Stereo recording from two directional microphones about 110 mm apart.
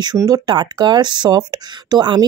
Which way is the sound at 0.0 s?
35° right (ahead or behind).